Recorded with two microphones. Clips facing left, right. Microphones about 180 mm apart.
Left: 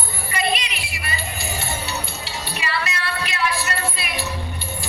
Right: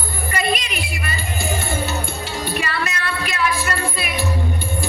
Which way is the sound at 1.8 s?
50° right (ahead or behind).